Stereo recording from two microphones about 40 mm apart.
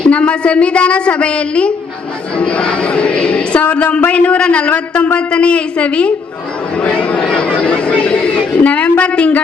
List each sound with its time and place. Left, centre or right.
0.0 s a woman's voice: left
4.7 s a sound: left
5.3 s a woman's voice: left
6.7 s chatter: left
8.0 s a man's voice: left